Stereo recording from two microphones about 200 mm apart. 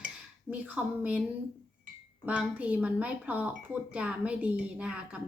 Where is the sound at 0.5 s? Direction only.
10° right (ahead or behind).